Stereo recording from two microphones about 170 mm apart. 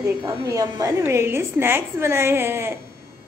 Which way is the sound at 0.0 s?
20° right (ahead or behind).